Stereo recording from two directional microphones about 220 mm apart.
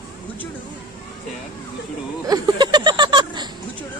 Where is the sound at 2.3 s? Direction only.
20° right (ahead or behind).